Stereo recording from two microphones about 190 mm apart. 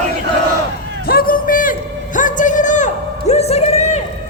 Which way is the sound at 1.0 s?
50° left (ahead or behind).